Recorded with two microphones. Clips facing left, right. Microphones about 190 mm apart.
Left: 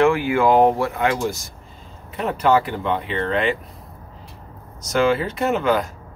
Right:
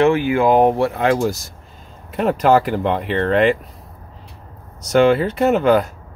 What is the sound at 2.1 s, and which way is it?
Speech, 50° right (ahead or behind).